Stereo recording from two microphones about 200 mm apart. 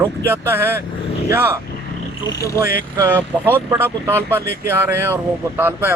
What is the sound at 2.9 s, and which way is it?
Speech, 15° right (ahead or behind).